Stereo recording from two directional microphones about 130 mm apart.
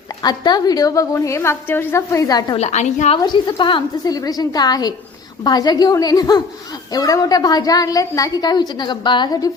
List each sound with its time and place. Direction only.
0.2 s a woman's voice: 30° left (ahead or behind)
2.6 s a woman's voice: 60° left (ahead or behind)
3.2 s a woman's voice: 35° left (ahead or behind)